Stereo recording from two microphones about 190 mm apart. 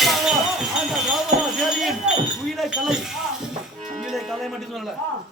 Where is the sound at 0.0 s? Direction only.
Centre (ahead or behind).